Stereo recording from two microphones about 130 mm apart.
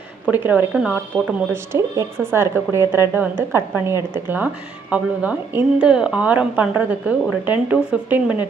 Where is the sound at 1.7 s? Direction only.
20° right (ahead or behind).